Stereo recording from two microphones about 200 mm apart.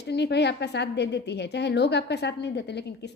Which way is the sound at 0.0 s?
55° left (ahead or behind).